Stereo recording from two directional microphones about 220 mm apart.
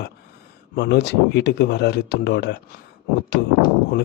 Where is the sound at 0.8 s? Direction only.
50° left (ahead or behind).